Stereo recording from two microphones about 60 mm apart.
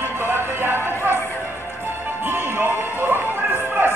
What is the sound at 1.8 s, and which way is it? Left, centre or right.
Music, right.